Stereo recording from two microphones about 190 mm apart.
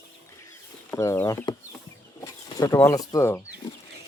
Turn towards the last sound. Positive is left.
turn(degrees=15)  # may be behind; listen again after turning